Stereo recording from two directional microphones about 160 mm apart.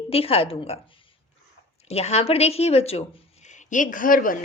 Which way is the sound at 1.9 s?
40° left (ahead or behind).